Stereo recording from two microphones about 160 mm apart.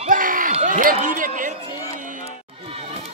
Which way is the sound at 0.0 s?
60° right (ahead or behind).